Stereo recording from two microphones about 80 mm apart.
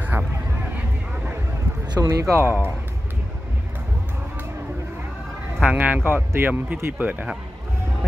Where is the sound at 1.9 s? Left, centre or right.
Right.